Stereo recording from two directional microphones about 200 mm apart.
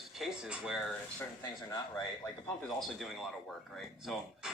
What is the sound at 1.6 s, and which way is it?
Speech, 15° left (ahead or behind).